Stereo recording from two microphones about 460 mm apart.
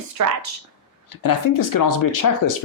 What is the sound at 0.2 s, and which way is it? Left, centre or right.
Speech, right.